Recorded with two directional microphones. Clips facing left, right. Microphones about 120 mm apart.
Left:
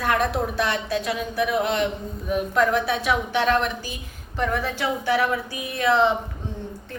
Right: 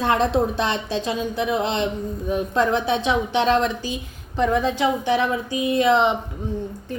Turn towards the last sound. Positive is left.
turn(degrees=-20)  # may be behind; listen again after turning